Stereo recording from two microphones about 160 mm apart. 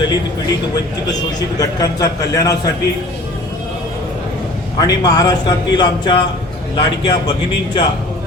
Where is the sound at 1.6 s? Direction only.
25° left (ahead or behind).